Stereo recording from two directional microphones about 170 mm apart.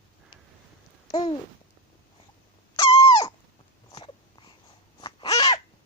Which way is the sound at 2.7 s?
35° left (ahead or behind).